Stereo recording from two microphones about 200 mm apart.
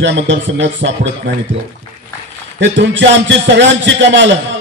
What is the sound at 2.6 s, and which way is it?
A man's voice, 65° right (ahead or behind).